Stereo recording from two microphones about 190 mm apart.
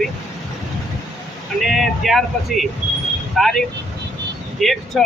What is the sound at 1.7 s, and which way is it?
Speech, centre (ahead or behind).